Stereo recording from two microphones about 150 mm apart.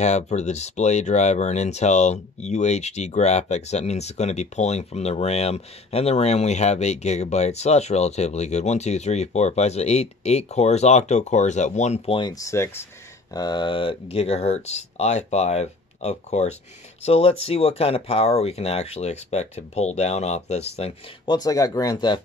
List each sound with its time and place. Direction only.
0.0 s speech: 50° left (ahead or behind)
12.2 s speech: 25° left (ahead or behind)
14.1 s speech: 45° left (ahead or behind)
21.3 s speech: 25° left (ahead or behind)